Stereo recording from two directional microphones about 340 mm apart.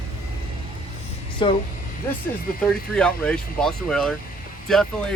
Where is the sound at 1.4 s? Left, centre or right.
Centre.